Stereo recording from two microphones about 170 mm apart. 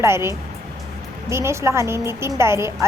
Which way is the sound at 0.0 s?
15° right (ahead or behind).